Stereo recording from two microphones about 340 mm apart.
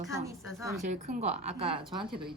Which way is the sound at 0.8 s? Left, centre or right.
Right.